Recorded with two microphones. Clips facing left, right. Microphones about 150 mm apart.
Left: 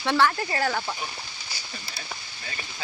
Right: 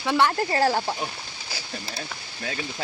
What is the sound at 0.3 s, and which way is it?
Speech, 35° right (ahead or behind).